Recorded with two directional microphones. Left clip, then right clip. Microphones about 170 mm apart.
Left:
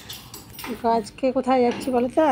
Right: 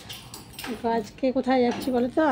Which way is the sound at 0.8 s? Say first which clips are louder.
Left 5 dB; 15° left (ahead or behind).